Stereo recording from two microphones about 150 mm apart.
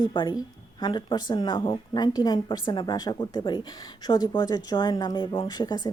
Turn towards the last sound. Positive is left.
turn(degrees=25)  # may be behind; listen again after turning